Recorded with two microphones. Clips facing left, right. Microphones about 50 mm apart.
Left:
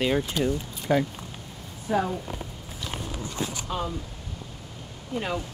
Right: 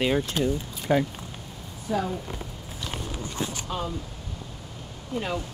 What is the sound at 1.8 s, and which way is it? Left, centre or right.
Speech, left.